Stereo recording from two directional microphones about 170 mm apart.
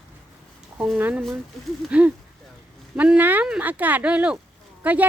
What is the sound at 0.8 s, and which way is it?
Speech, 10° right (ahead or behind).